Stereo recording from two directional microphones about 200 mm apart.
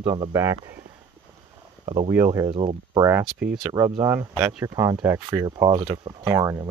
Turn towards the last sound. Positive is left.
turn(degrees=-15)  # may be behind; listen again after turning